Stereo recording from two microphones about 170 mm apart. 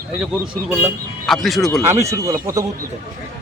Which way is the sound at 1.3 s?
Centre (ahead or behind).